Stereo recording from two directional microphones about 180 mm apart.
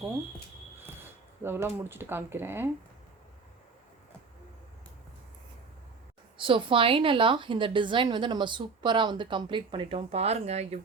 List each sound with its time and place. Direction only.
1.4 s speech: 15° right (ahead or behind)
6.3 s a woman's voice: 30° right (ahead or behind)